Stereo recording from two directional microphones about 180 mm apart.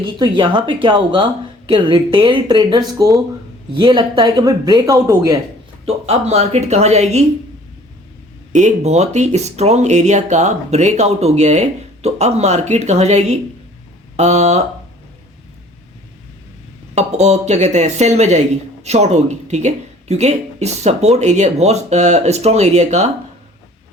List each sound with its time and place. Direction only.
0.0 s speech: 25° right (ahead or behind)
5.8 s speech: 35° right (ahead or behind)
8.5 s speech: 40° right (ahead or behind)
16.9 s speech: 40° right (ahead or behind)